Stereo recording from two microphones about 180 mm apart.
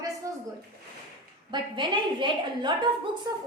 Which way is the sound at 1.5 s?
25° right (ahead or behind).